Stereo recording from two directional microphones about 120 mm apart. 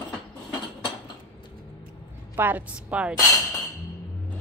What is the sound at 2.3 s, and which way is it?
Speech, 15° right (ahead or behind).